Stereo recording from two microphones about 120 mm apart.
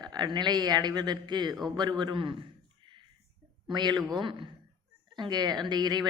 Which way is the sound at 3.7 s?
35° right (ahead or behind).